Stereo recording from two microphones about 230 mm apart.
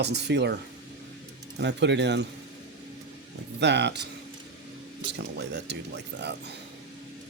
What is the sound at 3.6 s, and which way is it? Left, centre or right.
Speech, right.